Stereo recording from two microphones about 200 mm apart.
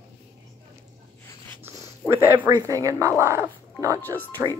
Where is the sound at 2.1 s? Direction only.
10° right (ahead or behind).